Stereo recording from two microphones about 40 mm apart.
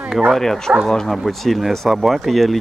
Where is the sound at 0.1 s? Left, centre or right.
Centre.